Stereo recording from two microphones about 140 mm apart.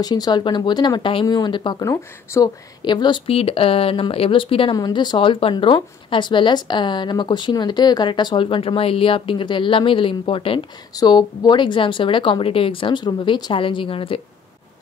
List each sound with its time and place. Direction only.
0.0 s speech: 30° left (ahead or behind)